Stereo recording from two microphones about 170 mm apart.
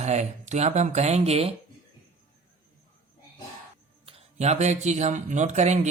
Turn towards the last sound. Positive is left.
turn(degrees=-45)  # may be behind; listen again after turning